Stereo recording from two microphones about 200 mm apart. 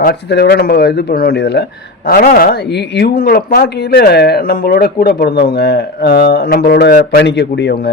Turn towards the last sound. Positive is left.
turn(degrees=55)  # may be behind; listen again after turning